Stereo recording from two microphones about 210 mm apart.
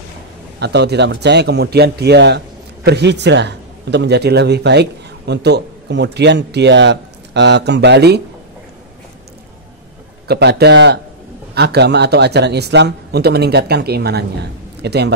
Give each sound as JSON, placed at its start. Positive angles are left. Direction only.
{"t": 0.6, "sound": "a man's voice", "side_deg": -55}
{"t": 10.2, "sound": "a man's voice", "side_deg": -50}